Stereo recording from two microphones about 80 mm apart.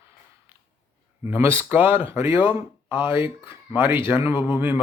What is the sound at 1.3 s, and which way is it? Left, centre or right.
Mantra, right.